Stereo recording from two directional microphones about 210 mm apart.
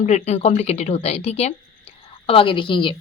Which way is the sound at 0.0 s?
30° left (ahead or behind).